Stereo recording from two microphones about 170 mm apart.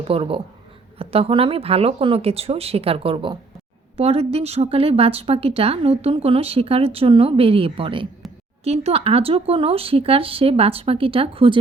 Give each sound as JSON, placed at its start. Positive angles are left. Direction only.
{"t": 0.0, "sound": "a woman's voice", "side_deg": -35}